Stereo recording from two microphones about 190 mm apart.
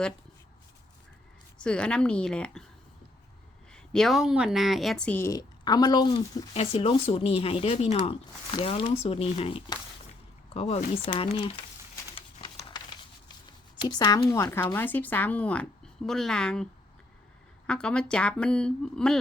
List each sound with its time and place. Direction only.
1.5 s speech: 5° left (ahead or behind)
3.7 s a woman's voice: centre (ahead or behind); by 11.5 s 25° left (ahead or behind)
12.1 s a sound: 30° left (ahead or behind)
13.8 s a woman's voice: 20° left (ahead or behind); by 16.6 s 5° left (ahead or behind)
17.7 s speech: 5° left (ahead or behind)